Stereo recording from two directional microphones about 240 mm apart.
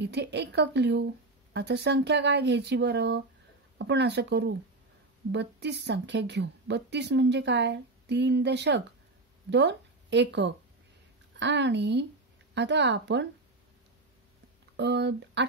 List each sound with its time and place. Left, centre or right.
0.0 s a woman's voice: right
14.8 s a woman's voice: right